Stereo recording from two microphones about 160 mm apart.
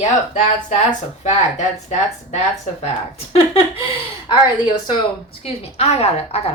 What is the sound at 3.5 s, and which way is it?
Speech, 35° left (ahead or behind).